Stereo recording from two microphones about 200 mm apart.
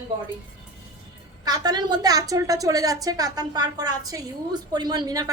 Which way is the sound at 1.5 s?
20° right (ahead or behind).